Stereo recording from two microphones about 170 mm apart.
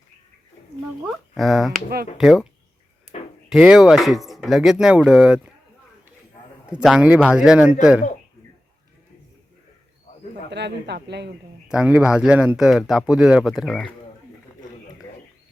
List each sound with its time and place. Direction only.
1.0 s speech: centre (ahead or behind)
3.1 s a sound: 40° left (ahead or behind)
3.5 s speech: 5° right (ahead or behind)
6.7 s speech: 5° right (ahead or behind)
10.5 s a man's voice: 85° right
11.7 s speech: 5° right (ahead or behind)